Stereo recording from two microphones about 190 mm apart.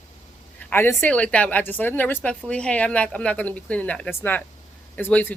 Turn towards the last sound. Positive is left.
turn(degrees=10)  # may be behind; listen again after turning